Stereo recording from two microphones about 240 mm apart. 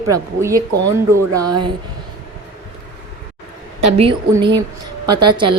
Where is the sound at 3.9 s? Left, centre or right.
Right.